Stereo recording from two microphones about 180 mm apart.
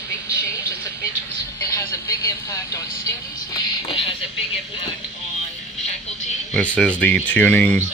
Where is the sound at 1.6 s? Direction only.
20° left (ahead or behind).